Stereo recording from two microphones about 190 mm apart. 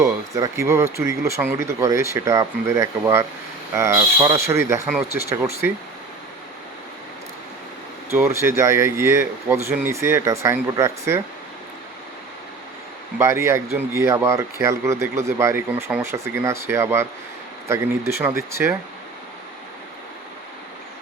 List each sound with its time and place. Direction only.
0.0 s speech: 15° right (ahead or behind)
8.1 s speech: 15° right (ahead or behind)
13.1 s speech: 15° right (ahead or behind)